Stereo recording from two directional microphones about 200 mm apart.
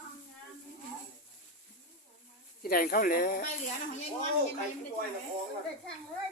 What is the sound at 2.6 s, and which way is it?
Speech, 45° left (ahead or behind).